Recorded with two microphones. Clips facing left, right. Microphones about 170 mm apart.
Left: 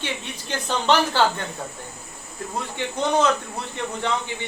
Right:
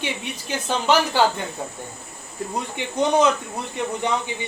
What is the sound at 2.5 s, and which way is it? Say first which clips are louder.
Speech: left 1 dB; 15° right (ahead or behind).